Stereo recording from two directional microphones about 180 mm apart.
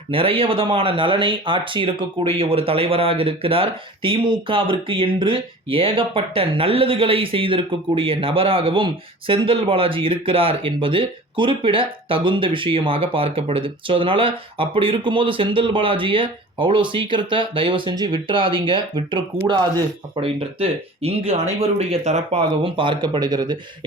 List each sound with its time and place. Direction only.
0.1 s speech: 30° right (ahead or behind)